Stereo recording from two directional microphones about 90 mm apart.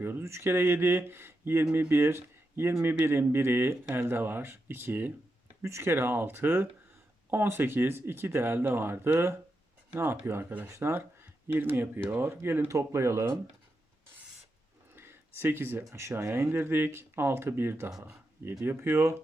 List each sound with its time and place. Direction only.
0.0 s speech: 25° right (ahead or behind)
14.9 s speech: 25° right (ahead or behind)